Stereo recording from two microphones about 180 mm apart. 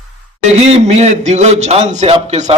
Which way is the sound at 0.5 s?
35° right (ahead or behind).